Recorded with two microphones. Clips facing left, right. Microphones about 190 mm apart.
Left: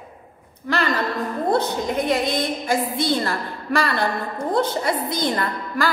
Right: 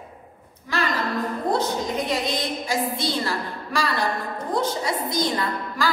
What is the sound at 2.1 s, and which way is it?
A woman's voice, 55° left (ahead or behind).